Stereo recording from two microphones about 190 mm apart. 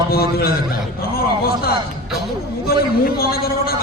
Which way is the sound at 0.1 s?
55° left (ahead or behind).